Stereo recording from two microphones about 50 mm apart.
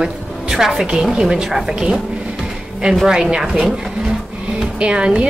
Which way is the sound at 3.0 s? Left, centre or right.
Centre.